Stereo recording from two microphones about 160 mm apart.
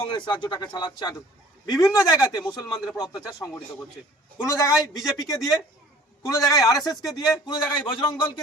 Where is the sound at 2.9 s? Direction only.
20° left (ahead or behind).